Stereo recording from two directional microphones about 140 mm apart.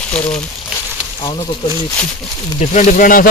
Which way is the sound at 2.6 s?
60° left (ahead or behind).